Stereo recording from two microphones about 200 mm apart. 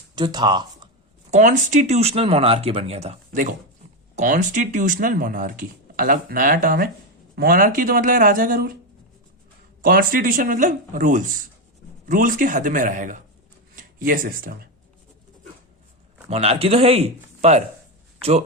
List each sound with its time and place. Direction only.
0.2 s speech: 20° right (ahead or behind)
1.3 s speech: 40° right (ahead or behind)
9.8 s speech: 45° right (ahead or behind)
16.3 s speech: 30° right (ahead or behind)